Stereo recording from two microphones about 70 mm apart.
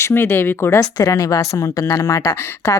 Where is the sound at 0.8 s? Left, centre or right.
Left.